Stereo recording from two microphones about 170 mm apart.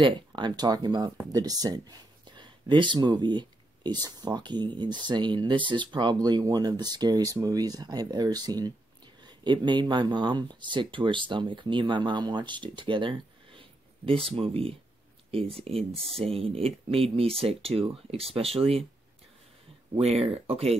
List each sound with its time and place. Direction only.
0.0 s speech: 25° right (ahead or behind)
20.0 s speech: 35° right (ahead or behind)